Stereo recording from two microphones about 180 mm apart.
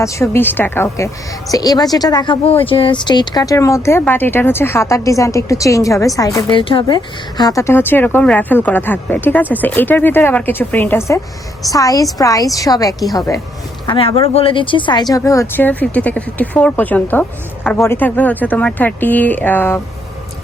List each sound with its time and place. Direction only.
0.0 s a woman's voice: 15° left (ahead or behind)